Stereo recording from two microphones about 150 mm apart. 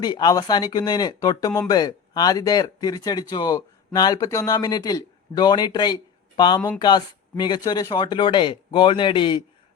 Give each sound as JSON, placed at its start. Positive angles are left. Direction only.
{"t": 0.0, "sound": "speech", "side_deg": 30}